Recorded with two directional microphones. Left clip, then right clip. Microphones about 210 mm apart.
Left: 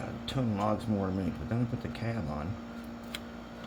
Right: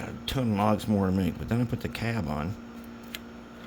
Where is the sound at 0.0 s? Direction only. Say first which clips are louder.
Right 3 dB; 45° right (ahead or behind).